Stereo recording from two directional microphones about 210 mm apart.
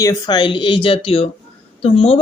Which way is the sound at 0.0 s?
15° left (ahead or behind).